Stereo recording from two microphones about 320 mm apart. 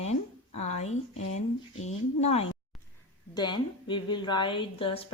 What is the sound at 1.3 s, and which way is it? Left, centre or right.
A woman's voice, left.